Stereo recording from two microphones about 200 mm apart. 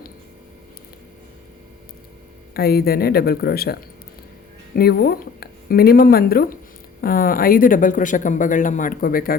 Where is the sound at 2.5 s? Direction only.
50° left (ahead or behind).